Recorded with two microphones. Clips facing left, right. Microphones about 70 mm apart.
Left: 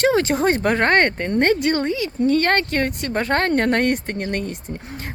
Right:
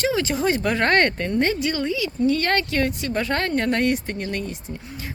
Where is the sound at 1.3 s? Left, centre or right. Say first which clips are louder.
Left 4 dB; left.